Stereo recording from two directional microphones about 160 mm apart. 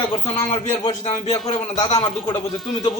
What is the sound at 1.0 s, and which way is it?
A man's voice, 35° left (ahead or behind).